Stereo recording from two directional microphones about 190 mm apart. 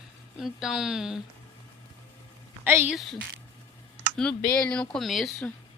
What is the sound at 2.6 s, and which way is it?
Speech, 10° right (ahead or behind).